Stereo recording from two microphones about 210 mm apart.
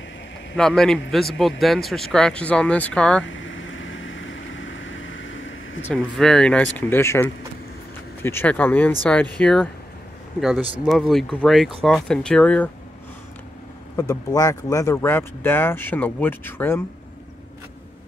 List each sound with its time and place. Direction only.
0.6 s speech: centre (ahead or behind)
3.3 s vehicle: 65° left (ahead or behind)
5.9 s speech: 5° left (ahead or behind)
10.9 s speech: centre (ahead or behind)
13.9 s speech: 15° left (ahead or behind)